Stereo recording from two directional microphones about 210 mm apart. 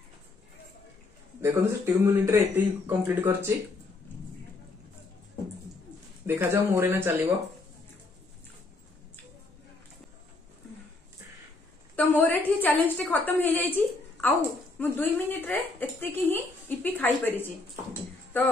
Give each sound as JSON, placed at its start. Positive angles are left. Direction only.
{"t": 1.4, "sound": "speech", "side_deg": -10}
{"t": 6.2, "sound": "speech", "side_deg": -15}
{"t": 11.9, "sound": "a woman's voice", "side_deg": 10}
{"t": 14.8, "sound": "a woman's voice", "side_deg": 10}